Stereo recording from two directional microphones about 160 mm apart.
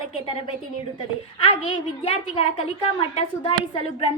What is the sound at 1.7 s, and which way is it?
Speech, 35° left (ahead or behind).